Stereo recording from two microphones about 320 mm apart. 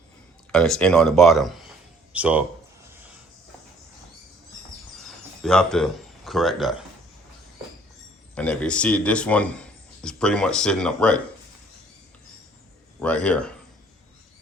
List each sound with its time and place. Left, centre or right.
0.5 s a man's voice: centre
5.4 s speech: centre
8.4 s a man's voice: centre
13.0 s speech: centre